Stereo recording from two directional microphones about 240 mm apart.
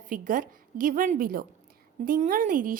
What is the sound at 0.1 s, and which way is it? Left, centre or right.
A woman's voice, right.